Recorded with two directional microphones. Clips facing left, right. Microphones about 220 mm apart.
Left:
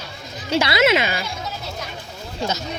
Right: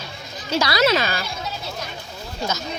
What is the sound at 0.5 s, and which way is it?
Speech, 25° left (ahead or behind).